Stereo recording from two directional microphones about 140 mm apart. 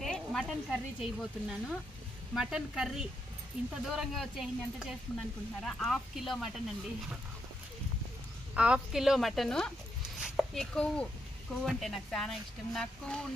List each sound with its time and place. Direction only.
0.0 s speech: 5° left (ahead or behind)
8.5 s a woman's voice: 5° right (ahead or behind)